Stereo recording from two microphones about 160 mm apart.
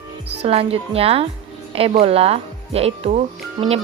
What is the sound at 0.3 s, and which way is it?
Speech, 40° right (ahead or behind).